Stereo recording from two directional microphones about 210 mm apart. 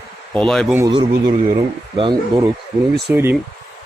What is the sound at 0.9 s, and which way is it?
Speech, 25° right (ahead or behind).